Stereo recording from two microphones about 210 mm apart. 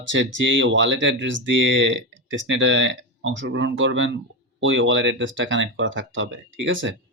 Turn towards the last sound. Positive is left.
turn(degrees=-65)  # may be behind; listen again after turning